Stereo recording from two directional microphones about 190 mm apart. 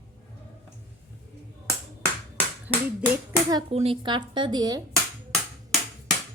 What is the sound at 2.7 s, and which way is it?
Clapping, 5° right (ahead or behind).